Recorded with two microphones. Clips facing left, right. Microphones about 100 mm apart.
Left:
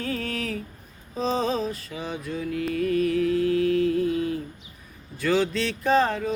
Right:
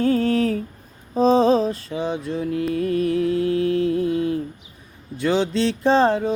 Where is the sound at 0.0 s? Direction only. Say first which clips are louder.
Right 11 dB; 30° right (ahead or behind).